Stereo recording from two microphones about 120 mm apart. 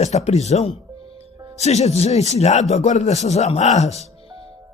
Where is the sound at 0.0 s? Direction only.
65° left (ahead or behind).